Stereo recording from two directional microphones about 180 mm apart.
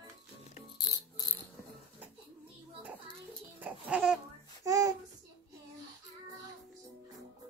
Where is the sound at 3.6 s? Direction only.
5° right (ahead or behind).